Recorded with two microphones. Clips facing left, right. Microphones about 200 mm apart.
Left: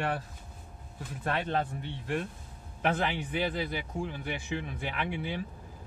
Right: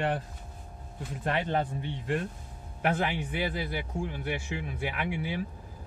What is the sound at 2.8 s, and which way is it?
A man's voice, 5° right (ahead or behind).